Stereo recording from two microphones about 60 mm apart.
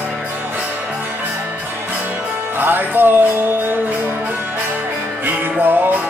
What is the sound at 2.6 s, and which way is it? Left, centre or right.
Music, right.